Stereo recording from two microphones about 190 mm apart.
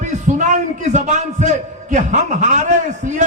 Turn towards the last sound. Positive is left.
turn(degrees=-40)  # may be behind; listen again after turning